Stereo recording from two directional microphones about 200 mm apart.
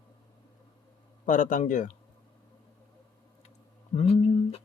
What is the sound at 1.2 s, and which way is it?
Speech, 40° left (ahead or behind).